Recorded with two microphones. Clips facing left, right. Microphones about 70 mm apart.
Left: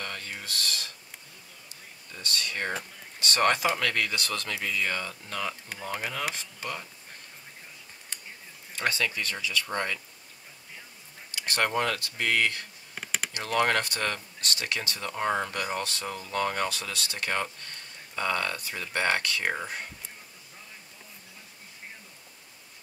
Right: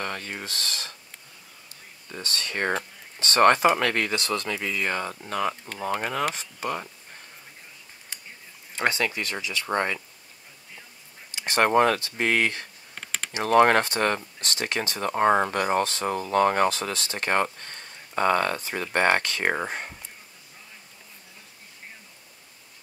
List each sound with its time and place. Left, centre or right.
0.0 s a sound: right
2.0 s speech: right
6.3 s speech: right
8.7 s speech: right
11.3 s speech: right
12.9 s a sound: centre
13.3 s speech: right
16.1 s speech: right